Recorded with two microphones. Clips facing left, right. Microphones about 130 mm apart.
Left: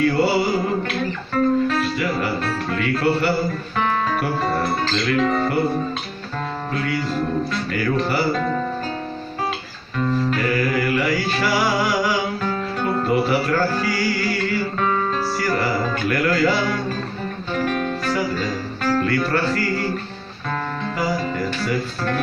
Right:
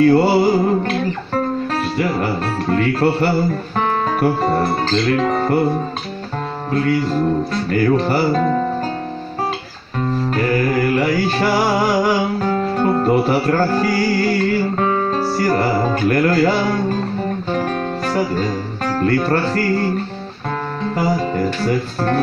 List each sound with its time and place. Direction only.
0.0 s music: 35° right (ahead or behind)
6.7 s music: 40° right (ahead or behind)
9.9 s music: 35° right (ahead or behind)
20.9 s music: 35° right (ahead or behind)